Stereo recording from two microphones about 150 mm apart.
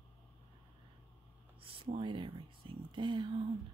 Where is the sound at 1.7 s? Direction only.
35° right (ahead or behind).